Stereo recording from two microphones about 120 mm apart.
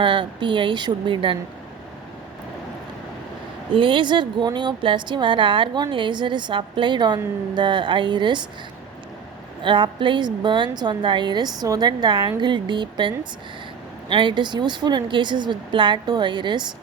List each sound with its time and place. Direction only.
0.0 s a woman's voice: 40° right (ahead or behind)
3.8 s a woman's voice: 40° right (ahead or behind)
9.6 s a woman's voice: 40° right (ahead or behind)